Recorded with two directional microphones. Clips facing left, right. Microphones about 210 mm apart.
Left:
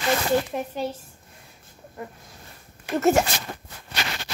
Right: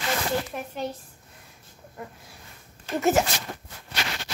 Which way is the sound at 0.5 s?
25° left (ahead or behind).